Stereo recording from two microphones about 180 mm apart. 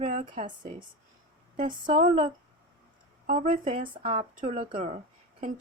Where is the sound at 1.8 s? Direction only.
45° right (ahead or behind).